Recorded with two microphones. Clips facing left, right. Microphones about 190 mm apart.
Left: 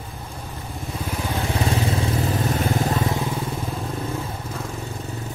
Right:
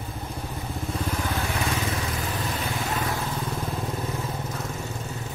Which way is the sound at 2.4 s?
45° left (ahead or behind).